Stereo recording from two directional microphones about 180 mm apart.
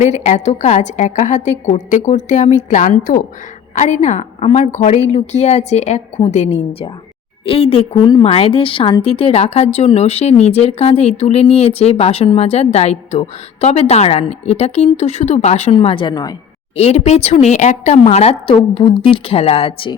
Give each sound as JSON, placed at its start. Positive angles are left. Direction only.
{"t": 0.0, "sound": "a woman's voice", "side_deg": 40}
{"t": 16.7, "sound": "a woman's voice", "side_deg": 35}